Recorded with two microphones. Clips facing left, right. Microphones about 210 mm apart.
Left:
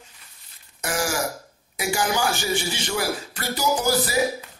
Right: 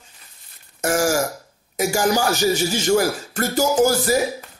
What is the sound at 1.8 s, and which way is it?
Speech, 40° right (ahead or behind).